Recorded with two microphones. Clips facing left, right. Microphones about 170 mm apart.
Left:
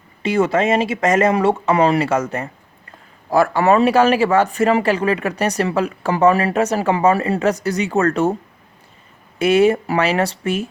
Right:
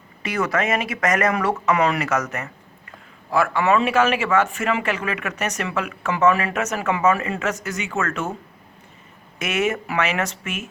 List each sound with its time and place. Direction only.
0.2 s speech: 25° left (ahead or behind)
9.4 s speech: 30° left (ahead or behind)